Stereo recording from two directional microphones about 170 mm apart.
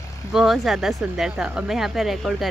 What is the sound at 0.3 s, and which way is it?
Speech, centre (ahead or behind).